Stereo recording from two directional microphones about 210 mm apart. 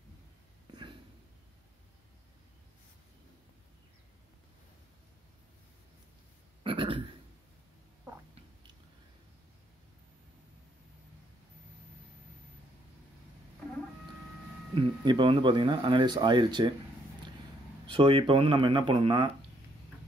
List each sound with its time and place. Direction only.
0.7 s a sound: 20° right (ahead or behind)
6.6 s burping: 25° right (ahead or behind)
14.8 s speech: 25° right (ahead or behind)
17.8 s speech: 25° right (ahead or behind)